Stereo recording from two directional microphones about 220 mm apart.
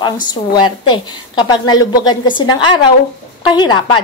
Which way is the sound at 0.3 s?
20° left (ahead or behind).